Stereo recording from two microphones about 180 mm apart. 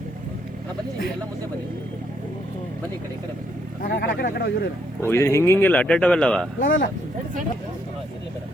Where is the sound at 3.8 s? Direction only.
60° left (ahead or behind).